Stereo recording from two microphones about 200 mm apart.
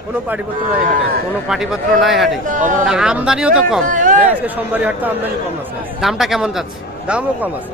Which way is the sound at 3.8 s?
40° right (ahead or behind).